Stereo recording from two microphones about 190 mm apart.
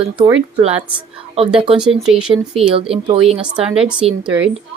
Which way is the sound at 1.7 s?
5° right (ahead or behind).